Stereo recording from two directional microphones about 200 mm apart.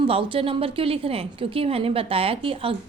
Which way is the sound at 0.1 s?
30° right (ahead or behind).